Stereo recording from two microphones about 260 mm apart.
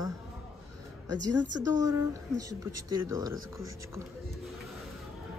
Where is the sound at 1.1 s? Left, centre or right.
Right.